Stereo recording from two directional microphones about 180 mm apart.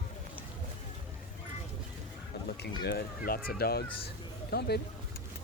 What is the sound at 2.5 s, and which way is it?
Speech, 65° left (ahead or behind).